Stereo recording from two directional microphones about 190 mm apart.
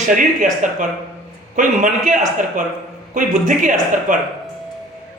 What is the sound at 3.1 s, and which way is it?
Speech, 45° right (ahead or behind).